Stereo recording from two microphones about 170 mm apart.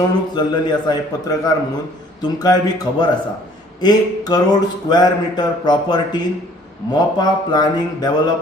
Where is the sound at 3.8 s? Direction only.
25° left (ahead or behind).